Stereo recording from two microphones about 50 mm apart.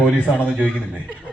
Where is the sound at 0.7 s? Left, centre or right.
Right.